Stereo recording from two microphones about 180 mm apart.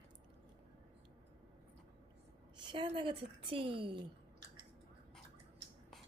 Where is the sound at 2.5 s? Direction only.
30° right (ahead or behind).